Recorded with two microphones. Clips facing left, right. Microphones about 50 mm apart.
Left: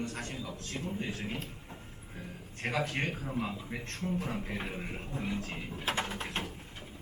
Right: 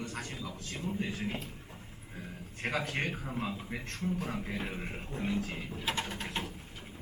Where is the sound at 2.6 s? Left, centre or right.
Centre.